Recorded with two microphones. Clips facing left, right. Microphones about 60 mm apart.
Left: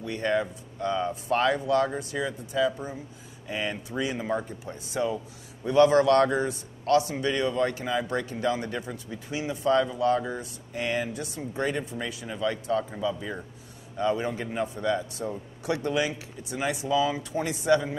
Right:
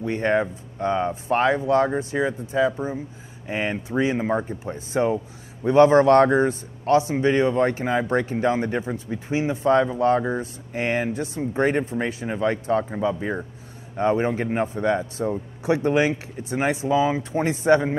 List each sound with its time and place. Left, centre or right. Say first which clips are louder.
0.0 s speech: right 5 dB; right